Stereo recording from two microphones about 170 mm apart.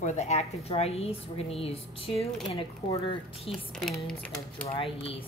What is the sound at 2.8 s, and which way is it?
Speech, 20° left (ahead or behind).